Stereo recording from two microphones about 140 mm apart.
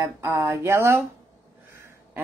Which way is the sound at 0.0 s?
15° right (ahead or behind).